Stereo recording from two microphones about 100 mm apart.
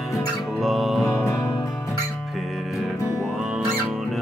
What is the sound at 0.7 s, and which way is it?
Music, centre (ahead or behind).